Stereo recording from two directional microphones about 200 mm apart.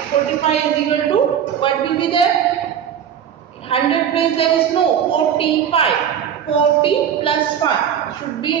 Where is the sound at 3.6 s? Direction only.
30° left (ahead or behind).